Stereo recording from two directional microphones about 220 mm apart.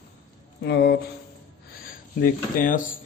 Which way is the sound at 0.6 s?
50° left (ahead or behind).